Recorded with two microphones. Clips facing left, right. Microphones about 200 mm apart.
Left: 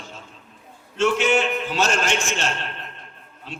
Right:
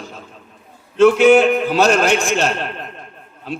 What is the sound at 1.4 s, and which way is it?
Speech, 40° right (ahead or behind).